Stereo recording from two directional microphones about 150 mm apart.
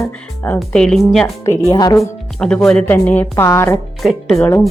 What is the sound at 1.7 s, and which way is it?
Speech, 25° left (ahead or behind).